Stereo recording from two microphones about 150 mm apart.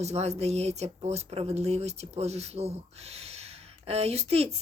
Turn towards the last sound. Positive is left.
turn(degrees=-45)  # may be behind; listen again after turning